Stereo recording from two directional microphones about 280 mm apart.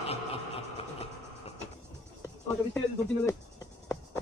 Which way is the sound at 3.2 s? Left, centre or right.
Centre.